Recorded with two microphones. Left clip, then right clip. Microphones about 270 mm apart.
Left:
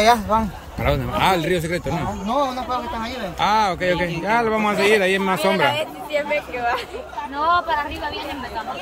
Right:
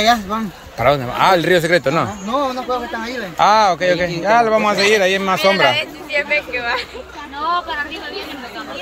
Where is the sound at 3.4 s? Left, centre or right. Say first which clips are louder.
Right 6 dB; centre.